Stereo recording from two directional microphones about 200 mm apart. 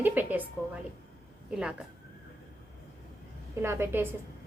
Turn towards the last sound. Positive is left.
turn(degrees=-10)  # may be behind; listen again after turning